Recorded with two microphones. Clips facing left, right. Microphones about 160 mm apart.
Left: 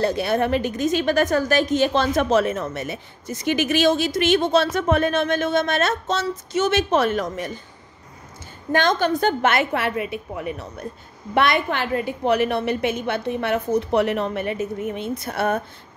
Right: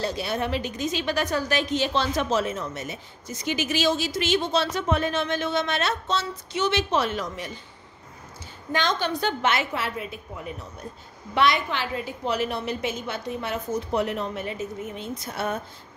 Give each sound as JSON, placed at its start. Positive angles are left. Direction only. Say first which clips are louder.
{"t": 0.0, "sound": "a woman's voice", "louder": "left 7 dB", "side_deg": 55}
{"t": 8.7, "sound": "a woman's voice", "louder": "left 6 dB", "side_deg": 50}
{"t": 11.3, "sound": "a woman's voice", "louder": "left 3 dB", "side_deg": 55}